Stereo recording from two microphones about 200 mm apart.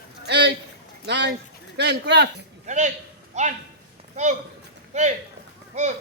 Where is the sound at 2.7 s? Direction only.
35° right (ahead or behind).